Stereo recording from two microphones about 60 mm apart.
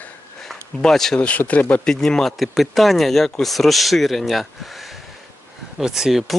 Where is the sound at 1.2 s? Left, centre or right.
Left.